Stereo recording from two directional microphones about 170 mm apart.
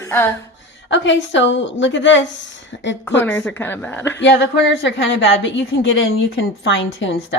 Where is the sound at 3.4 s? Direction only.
10° left (ahead or behind).